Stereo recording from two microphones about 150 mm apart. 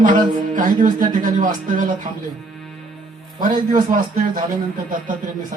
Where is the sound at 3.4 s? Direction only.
65° right (ahead or behind).